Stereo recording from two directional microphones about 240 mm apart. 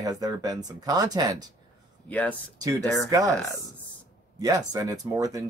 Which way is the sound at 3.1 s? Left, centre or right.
Centre.